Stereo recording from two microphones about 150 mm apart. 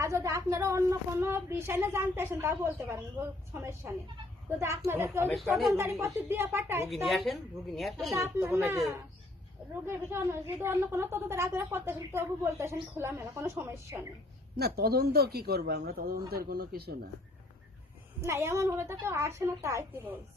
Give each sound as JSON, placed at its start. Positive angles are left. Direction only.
{"t": 0.0, "sound": "a woman's voice", "side_deg": -20}
{"t": 6.8, "sound": "a woman's voice", "side_deg": 0}
{"t": 8.1, "sound": "a woman's voice", "side_deg": -20}
{"t": 9.8, "sound": "a woman's voice", "side_deg": -15}
{"t": 14.5, "sound": "speech", "side_deg": -90}
{"t": 18.2, "sound": "a woman's voice", "side_deg": -15}